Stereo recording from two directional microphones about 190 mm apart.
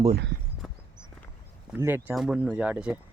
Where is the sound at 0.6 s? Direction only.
5° right (ahead or behind).